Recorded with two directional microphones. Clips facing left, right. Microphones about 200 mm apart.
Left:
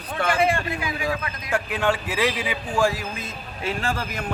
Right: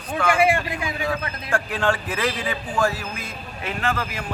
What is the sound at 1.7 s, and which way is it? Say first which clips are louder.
A man's voice: left 1 dB; 10° left (ahead or behind).